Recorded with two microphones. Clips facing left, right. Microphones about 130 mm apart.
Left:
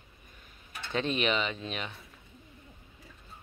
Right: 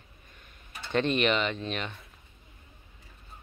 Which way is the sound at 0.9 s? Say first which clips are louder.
Right 4 dB; centre (ahead or behind).